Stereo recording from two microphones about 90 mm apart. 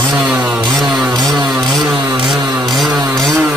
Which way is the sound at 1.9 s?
70° right (ahead or behind).